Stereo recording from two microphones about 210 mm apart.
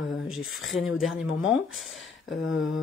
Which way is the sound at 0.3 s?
Centre (ahead or behind).